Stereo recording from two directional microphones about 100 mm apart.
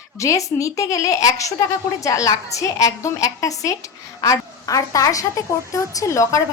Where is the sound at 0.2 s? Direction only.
30° left (ahead or behind).